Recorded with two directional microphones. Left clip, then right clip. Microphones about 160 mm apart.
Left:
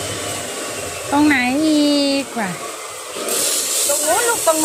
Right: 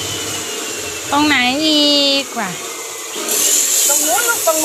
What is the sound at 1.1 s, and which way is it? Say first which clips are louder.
Speech: right 2 dB; 30° left (ahead or behind).